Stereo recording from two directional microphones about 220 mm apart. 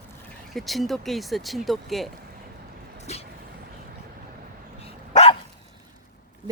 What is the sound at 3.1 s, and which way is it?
Vehicle, 30° left (ahead or behind).